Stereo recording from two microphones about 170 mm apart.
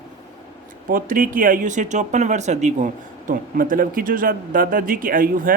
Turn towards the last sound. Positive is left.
turn(degrees=-55)  # may be behind; listen again after turning